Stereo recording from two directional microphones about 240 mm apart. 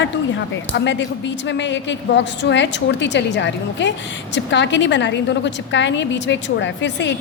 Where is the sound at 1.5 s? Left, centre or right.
Left.